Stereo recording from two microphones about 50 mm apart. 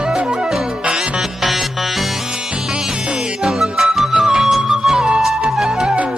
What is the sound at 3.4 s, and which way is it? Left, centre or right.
Music, centre.